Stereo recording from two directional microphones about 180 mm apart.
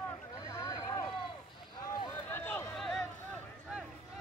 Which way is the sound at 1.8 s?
20° left (ahead or behind).